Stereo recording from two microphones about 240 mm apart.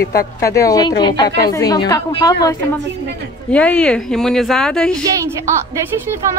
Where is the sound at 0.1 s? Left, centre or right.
Left.